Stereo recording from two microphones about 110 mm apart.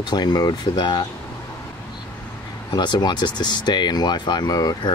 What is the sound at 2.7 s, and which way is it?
Speech, 40° left (ahead or behind).